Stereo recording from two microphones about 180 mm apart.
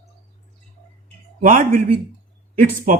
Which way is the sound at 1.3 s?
50° right (ahead or behind).